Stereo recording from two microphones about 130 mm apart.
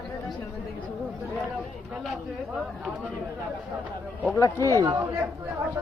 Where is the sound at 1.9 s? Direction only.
Centre (ahead or behind).